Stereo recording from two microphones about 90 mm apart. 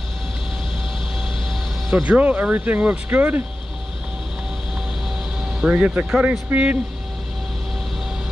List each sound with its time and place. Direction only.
1.9 s speech: 5° right (ahead or behind)
2.1 s speech: 15° right (ahead or behind)
5.6 s speech: 15° right (ahead or behind)
6.5 s speech: 20° right (ahead or behind)